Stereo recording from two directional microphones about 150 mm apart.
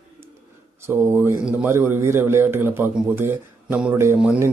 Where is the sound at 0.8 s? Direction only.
15° right (ahead or behind).